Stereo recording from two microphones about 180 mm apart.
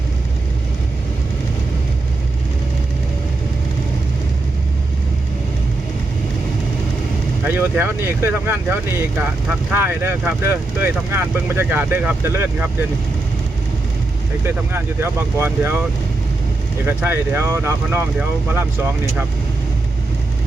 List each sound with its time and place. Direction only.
7.4 s speech: 10° right (ahead or behind)
14.4 s speech: 15° right (ahead or behind)
16.8 s speech: 10° right (ahead or behind)